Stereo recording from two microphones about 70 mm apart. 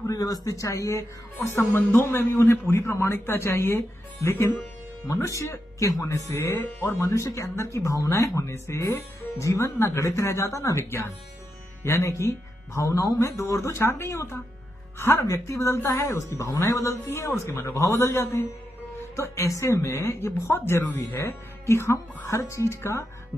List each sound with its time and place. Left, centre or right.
0.0 s a man's voice: left